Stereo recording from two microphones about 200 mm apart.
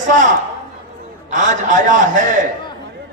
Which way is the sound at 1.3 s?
40° right (ahead or behind).